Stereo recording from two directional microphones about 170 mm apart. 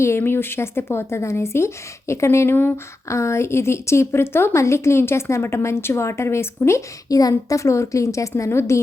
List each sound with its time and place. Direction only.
0.0 s a woman's voice: 15° left (ahead or behind)